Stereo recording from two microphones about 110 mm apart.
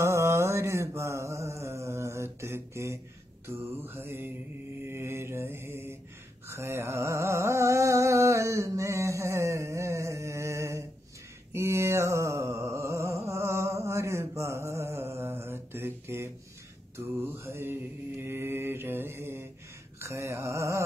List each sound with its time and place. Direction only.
0.0 s mantra: 25° right (ahead or behind)
6.4 s carnatic music: 25° right (ahead or behind)
11.5 s music: 25° right (ahead or behind)
17.2 s mantra: 25° right (ahead or behind)
20.0 s a sound: 25° right (ahead or behind)